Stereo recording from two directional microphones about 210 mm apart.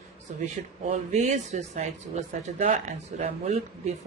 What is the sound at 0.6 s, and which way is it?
Speech, 35° right (ahead or behind).